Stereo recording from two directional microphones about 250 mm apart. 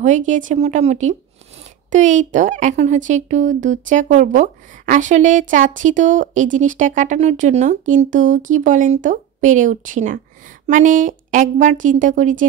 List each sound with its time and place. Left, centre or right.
0.0 s speech: right